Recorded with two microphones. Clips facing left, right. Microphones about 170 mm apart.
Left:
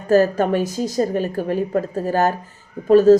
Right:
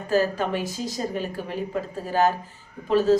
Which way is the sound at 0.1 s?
45° left (ahead or behind).